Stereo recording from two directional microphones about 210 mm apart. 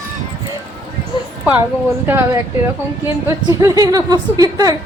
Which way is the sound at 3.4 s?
20° right (ahead or behind).